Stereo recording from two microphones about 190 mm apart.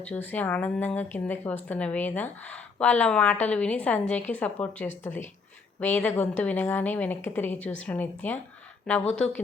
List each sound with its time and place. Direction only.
0.0 s a woman's voice: 10° left (ahead or behind)